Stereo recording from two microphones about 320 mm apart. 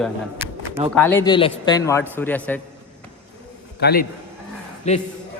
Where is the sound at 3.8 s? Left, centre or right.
Left.